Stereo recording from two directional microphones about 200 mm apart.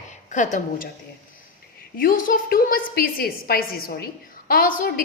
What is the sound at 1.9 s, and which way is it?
A woman's voice, 45° left (ahead or behind).